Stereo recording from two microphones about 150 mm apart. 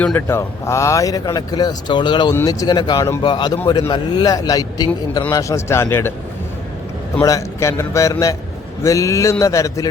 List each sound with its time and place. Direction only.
0.0 s speech: 15° left (ahead or behind)
7.2 s speech: 20° left (ahead or behind)